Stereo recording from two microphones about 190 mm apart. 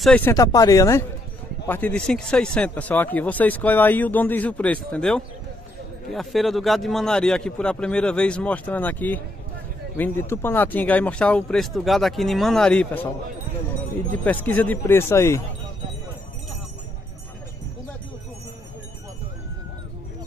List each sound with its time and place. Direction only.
0.0 s speech: 5° left (ahead or behind)
0.3 s speech: 20° left (ahead or behind)
14.1 s speech: 10° left (ahead or behind)